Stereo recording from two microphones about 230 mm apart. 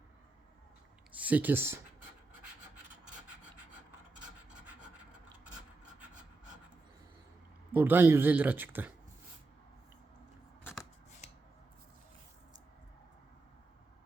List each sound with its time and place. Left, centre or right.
1.1 s speech: centre
7.7 s speech: centre
11.2 s a sound: left